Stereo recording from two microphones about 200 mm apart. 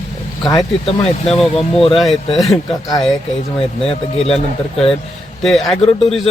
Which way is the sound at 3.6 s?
30° left (ahead or behind).